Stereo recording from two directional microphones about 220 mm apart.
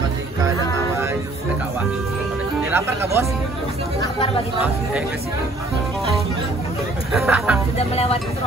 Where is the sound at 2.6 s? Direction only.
10° right (ahead or behind).